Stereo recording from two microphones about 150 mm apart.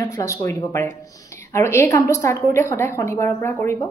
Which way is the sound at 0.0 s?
20° left (ahead or behind).